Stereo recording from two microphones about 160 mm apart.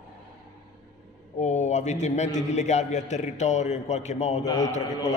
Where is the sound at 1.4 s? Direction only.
45° left (ahead or behind).